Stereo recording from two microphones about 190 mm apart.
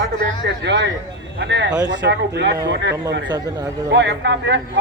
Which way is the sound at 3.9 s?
65° right (ahead or behind).